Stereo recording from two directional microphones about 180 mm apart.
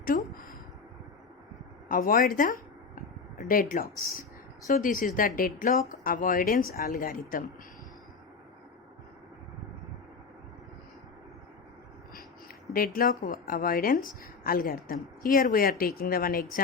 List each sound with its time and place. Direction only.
0.0 s speech: 50° left (ahead or behind)
1.9 s a woman's voice: 50° left (ahead or behind)
2.9 s a sound: 50° left (ahead or behind)
4.7 s a woman's voice: 50° left (ahead or behind)
12.7 s a woman's voice: 55° left (ahead or behind)